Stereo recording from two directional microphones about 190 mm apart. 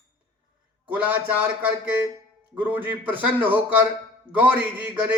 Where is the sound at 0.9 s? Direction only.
10° right (ahead or behind).